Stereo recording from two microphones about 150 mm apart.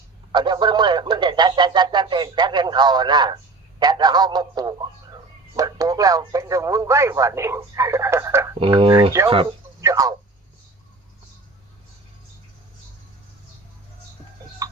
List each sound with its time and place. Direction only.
0.3 s speech: 30° right (ahead or behind)
8.5 s speech: 40° right (ahead or behind); by 10.2 s 20° right (ahead or behind)